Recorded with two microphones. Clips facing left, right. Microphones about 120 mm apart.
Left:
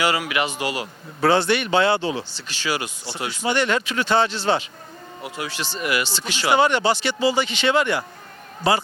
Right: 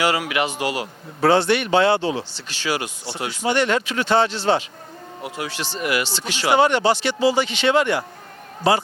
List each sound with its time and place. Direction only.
0.0 s a man's voice: 50° right (ahead or behind)